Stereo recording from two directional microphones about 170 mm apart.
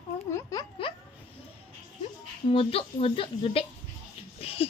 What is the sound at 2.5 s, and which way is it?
Speech, 35° left (ahead or behind).